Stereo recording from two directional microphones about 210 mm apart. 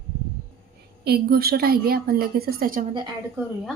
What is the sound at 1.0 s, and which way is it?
A woman's voice, 50° right (ahead or behind).